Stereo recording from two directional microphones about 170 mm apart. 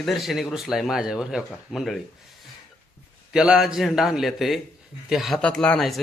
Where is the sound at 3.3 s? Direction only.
5° right (ahead or behind).